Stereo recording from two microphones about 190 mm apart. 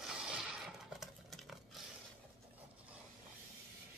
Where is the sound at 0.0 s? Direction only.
5° right (ahead or behind).